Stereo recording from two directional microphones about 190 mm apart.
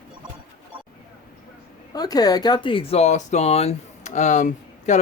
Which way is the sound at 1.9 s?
20° left (ahead or behind).